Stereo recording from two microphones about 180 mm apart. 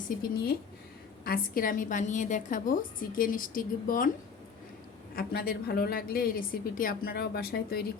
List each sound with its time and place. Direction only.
1.2 s a woman's voice: 55° left (ahead or behind)
5.1 s a woman's voice: 60° left (ahead or behind)